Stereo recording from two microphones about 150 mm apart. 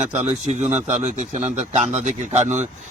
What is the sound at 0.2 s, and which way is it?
A man's voice, 50° right (ahead or behind).